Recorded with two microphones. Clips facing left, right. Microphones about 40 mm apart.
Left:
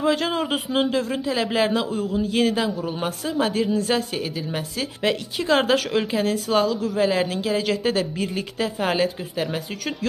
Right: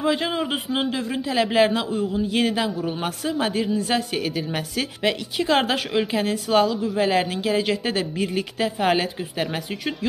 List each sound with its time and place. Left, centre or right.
0.0 s a woman's voice: right
0.3 s a man's voice: centre
1.2 s a woman's voice: right
3.8 s a woman's voice: right